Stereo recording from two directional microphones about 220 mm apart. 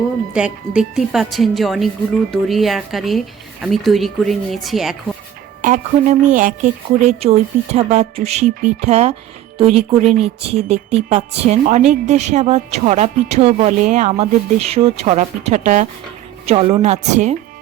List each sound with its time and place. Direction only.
0.3 s speech: 5° right (ahead or behind)
5.6 s a woman's voice: 35° right (ahead or behind)